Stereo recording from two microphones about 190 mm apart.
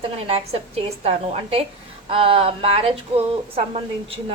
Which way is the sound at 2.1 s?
30° right (ahead or behind).